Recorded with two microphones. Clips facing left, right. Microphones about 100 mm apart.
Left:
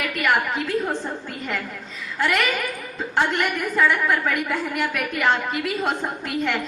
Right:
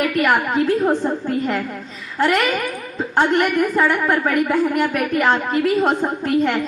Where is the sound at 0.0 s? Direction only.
40° right (ahead or behind).